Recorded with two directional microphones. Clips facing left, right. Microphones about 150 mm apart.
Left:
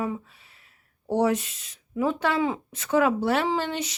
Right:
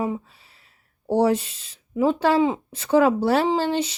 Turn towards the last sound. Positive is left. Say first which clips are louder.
# right 5 dB
turn(degrees=-30)  # may be behind; listen again after turning